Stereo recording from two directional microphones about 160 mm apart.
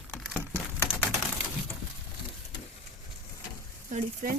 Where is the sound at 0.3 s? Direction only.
15° left (ahead or behind).